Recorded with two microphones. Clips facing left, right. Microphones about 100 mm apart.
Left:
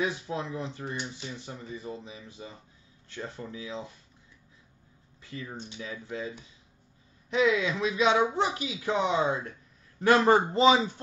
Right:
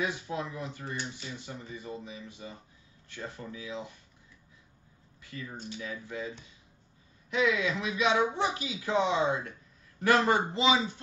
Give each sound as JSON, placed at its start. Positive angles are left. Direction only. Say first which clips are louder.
{"t": 0.0, "sound": "speech", "louder": "left 2 dB", "side_deg": 25}
{"t": 5.2, "sound": "speech", "louder": "left 2 dB", "side_deg": 25}
{"t": 7.3, "sound": "a man's voice", "louder": "left 3 dB", "side_deg": 30}